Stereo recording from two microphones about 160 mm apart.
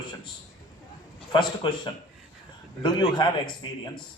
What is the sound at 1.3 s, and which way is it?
A man's voice, 30° left (ahead or behind).